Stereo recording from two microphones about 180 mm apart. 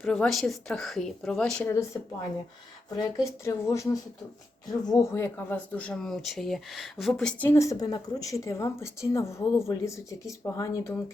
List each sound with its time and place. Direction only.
0.0 s a woman's voice: centre (ahead or behind)
3.0 s speech: 15° left (ahead or behind)
4.9 s speech: 15° left (ahead or behind)